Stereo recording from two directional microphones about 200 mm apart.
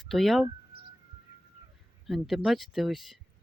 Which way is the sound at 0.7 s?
55° right (ahead or behind).